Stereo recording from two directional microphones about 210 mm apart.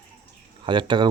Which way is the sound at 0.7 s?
20° right (ahead or behind).